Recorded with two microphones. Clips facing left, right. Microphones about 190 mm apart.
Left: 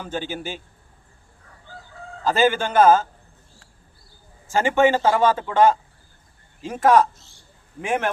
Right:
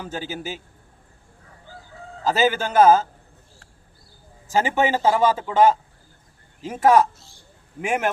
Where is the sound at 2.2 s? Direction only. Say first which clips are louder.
Left 1 dB; 5° right (ahead or behind).